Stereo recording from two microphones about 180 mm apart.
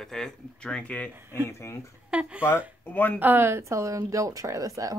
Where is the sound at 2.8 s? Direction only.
10° left (ahead or behind).